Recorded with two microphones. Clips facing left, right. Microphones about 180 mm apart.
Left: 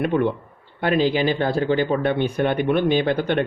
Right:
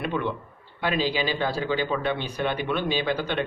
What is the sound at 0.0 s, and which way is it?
Speech, 55° left (ahead or behind).